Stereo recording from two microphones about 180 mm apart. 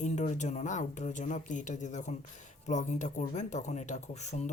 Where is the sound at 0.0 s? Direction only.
40° left (ahead or behind).